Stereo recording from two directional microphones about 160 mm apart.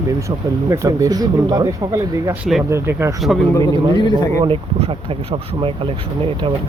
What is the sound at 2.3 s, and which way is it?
Speech, centre (ahead or behind).